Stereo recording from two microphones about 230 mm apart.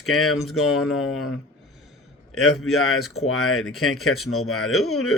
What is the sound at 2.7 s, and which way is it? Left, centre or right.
Speech, left.